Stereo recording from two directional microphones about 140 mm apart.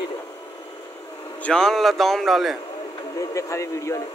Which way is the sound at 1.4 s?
5° left (ahead or behind).